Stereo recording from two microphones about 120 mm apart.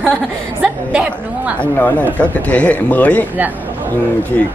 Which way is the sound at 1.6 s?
10° left (ahead or behind).